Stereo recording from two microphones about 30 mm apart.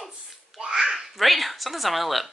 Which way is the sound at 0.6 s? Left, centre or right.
Right.